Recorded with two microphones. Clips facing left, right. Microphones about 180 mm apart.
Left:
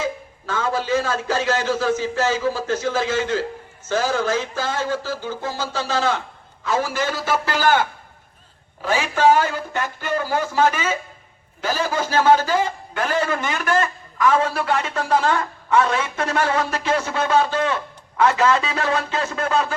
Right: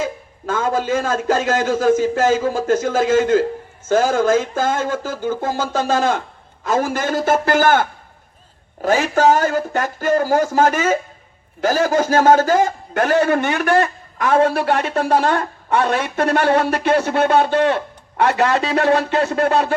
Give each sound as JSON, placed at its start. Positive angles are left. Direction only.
{"t": 0.0, "sound": "a man's voice", "side_deg": -45}